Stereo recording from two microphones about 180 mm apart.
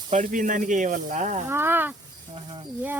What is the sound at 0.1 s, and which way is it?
Speech, 45° right (ahead or behind).